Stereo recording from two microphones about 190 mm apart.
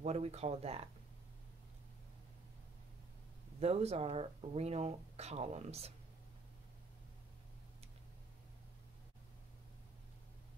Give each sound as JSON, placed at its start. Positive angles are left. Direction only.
{"t": 0.0, "sound": "speech", "side_deg": -35}
{"t": 3.5, "sound": "speech", "side_deg": -35}